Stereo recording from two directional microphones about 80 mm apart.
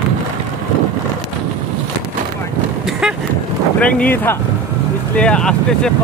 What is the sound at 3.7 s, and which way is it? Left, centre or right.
Speech, centre.